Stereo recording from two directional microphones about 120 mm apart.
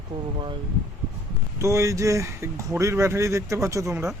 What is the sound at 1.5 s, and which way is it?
Speech, 25° right (ahead or behind).